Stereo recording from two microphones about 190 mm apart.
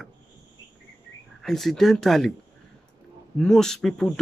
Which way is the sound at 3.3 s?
5° left (ahead or behind).